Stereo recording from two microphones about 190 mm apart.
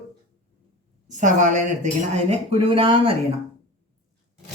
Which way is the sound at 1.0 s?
40° right (ahead or behind).